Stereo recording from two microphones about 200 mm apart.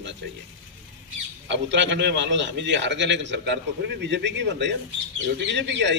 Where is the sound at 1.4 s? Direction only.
65° right (ahead or behind).